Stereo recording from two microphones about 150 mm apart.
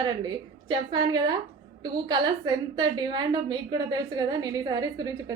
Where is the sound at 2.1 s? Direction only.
25° right (ahead or behind).